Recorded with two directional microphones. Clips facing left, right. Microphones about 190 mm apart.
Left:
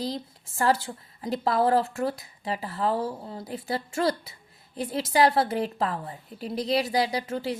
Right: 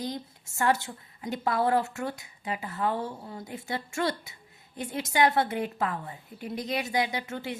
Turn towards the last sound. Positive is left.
turn(degrees=30)  # may be behind; listen again after turning